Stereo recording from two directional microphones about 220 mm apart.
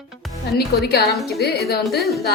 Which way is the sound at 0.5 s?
45° left (ahead or behind).